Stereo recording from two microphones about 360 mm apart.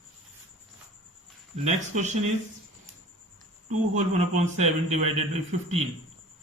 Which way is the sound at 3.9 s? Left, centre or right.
Centre.